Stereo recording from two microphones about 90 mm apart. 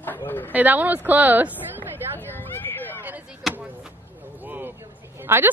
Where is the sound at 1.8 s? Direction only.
20° left (ahead or behind).